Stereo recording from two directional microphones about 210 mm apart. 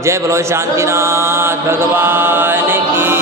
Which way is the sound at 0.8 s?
15° right (ahead or behind).